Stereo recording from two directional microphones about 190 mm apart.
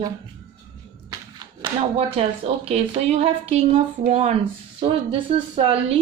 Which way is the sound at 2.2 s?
30° right (ahead or behind).